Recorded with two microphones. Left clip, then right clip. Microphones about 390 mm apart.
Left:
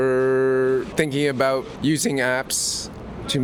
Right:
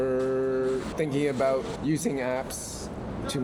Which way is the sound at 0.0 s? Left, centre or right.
Left.